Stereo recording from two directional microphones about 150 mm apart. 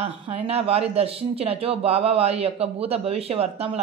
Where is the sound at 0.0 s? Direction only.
45° right (ahead or behind).